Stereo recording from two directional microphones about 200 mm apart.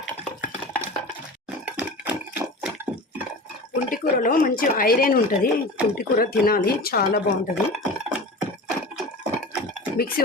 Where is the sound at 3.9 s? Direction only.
45° left (ahead or behind).